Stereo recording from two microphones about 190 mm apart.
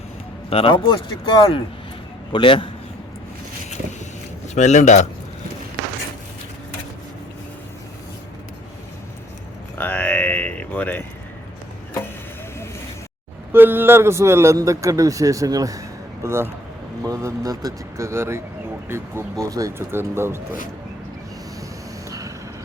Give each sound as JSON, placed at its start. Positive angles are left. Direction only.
{"t": 0.5, "sound": "speech", "side_deg": 25}
{"t": 4.5, "sound": "speech", "side_deg": 40}
{"t": 9.7, "sound": "a sound", "side_deg": 10}
{"t": 13.5, "sound": "a man's voice", "side_deg": -10}